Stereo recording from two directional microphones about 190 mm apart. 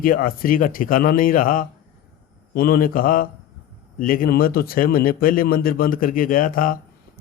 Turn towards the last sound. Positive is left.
turn(degrees=45)  # may be behind; listen again after turning